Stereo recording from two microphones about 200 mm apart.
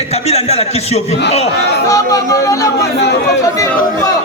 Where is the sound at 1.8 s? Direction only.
15° left (ahead or behind).